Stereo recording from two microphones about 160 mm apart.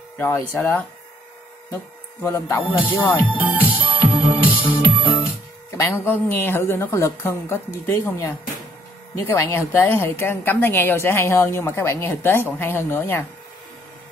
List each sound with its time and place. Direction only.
0.2 s a woman's voice: 15° left (ahead or behind)
2.2 s a woman's voice: 20° left (ahead or behind)
3.0 s speech: 30° left (ahead or behind)
3.5 s music: 10° left (ahead or behind)
5.8 s a woman's voice: 15° left (ahead or behind)